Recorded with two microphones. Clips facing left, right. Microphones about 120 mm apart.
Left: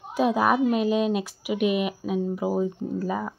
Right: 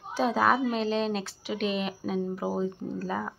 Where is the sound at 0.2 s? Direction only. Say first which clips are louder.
Left 3 dB; 15° left (ahead or behind).